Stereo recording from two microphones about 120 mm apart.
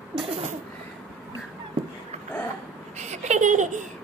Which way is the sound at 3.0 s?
75° right (ahead or behind).